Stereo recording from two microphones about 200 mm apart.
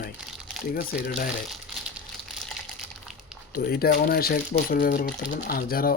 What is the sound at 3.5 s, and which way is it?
Speech, 50° left (ahead or behind).